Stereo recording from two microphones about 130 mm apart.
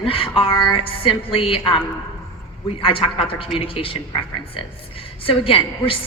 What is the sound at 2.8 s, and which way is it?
A woman's voice, 45° left (ahead or behind).